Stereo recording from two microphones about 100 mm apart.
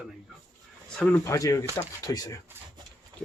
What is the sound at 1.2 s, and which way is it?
Speech, 30° left (ahead or behind).